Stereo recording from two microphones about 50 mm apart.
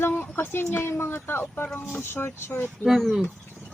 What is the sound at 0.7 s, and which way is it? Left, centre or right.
A woman's voice, left.